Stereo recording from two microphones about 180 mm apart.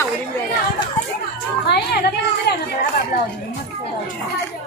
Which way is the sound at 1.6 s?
65° left (ahead or behind).